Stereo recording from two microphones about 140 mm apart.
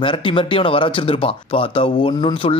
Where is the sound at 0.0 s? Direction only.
40° left (ahead or behind).